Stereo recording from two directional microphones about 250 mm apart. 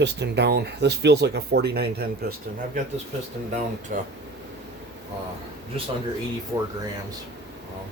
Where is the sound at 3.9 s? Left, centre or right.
Right.